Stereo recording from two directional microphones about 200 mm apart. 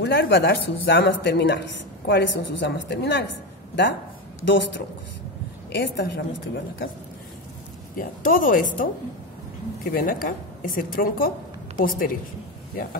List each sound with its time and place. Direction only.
0.0 s a woman's voice: 55° left (ahead or behind)
4.5 s a woman's voice: 65° left (ahead or behind)
8.0 s a woman's voice: 45° left (ahead or behind)
9.9 s a woman's voice: 45° left (ahead or behind)